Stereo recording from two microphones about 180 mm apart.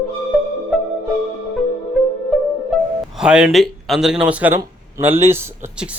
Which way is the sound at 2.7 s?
Centre (ahead or behind).